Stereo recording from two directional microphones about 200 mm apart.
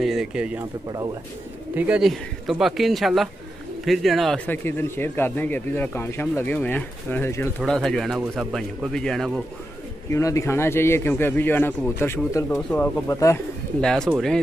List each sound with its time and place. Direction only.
0.0 s speech: 5° right (ahead or behind)
1.8 s speech: 5° right (ahead or behind)
10.1 s speech: 15° left (ahead or behind)
13.7 s speech: 5° left (ahead or behind)